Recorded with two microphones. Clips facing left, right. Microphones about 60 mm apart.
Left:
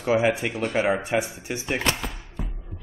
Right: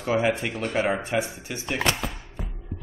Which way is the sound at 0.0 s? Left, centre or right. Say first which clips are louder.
Left 2 dB; centre.